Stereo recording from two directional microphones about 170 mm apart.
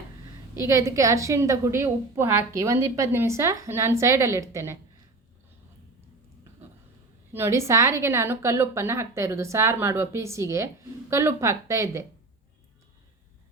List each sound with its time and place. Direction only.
0.6 s a woman's voice: 20° right (ahead or behind)
7.3 s a woman's voice: 15° right (ahead or behind)